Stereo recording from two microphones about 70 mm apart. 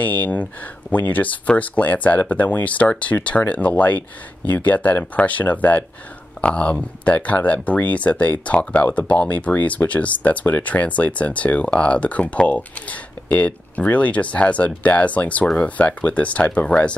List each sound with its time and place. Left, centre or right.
0.0 s speech: left